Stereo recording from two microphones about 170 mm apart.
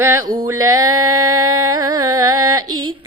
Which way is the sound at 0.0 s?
15° right (ahead or behind).